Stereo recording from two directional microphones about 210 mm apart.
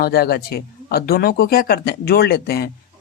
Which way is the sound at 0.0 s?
45° left (ahead or behind).